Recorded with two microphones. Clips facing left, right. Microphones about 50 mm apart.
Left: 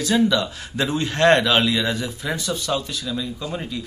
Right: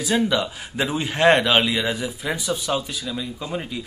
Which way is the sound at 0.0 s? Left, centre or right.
Centre.